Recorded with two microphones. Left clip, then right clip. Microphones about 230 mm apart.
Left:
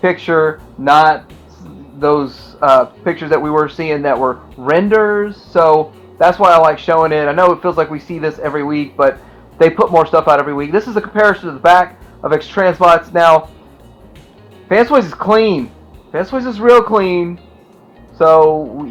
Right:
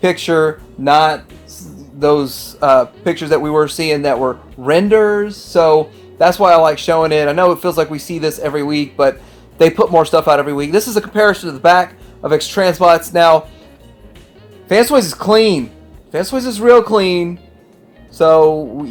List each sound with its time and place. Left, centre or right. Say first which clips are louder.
0.0 s speech: left 1 dB; right
14.7 s speech: left 1 dB; right